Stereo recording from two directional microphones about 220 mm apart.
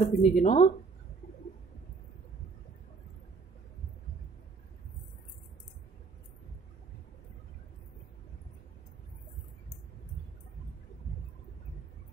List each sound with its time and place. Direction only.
0.0 s speech: 30° left (ahead or behind)